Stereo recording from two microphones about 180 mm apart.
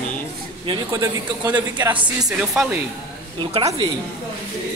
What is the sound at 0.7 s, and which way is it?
A woman's voice, 20° right (ahead or behind).